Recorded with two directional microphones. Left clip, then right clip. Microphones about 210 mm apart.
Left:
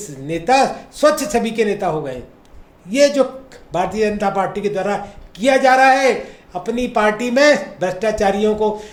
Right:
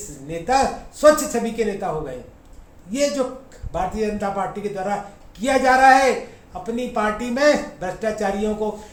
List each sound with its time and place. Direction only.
0.3 s speech: 45° left (ahead or behind)